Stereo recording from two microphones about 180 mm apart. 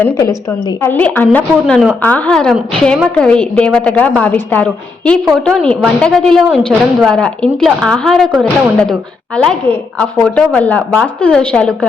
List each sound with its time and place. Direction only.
0.0 s a woman's voice: 20° left (ahead or behind)